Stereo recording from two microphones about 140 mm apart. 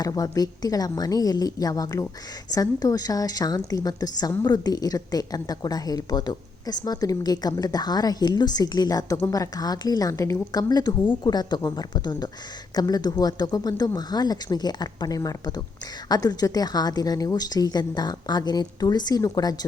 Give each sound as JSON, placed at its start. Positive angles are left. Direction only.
{"t": 0.0, "sound": "a woman's voice", "side_deg": 25}